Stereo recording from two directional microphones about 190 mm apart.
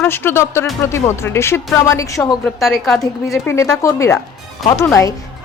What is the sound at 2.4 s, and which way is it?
Speech, centre (ahead or behind).